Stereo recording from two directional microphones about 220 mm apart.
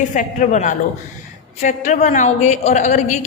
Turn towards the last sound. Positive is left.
turn(degrees=30)  # may be behind; listen again after turning